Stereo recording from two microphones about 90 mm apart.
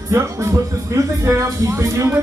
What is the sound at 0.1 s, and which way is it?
Speech, 35° right (ahead or behind).